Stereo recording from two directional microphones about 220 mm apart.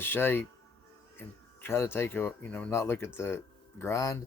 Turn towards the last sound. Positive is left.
turn(degrees=10)  # may be behind; listen again after turning